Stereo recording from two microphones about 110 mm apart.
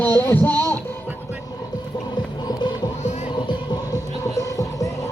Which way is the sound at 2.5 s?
40° left (ahead or behind).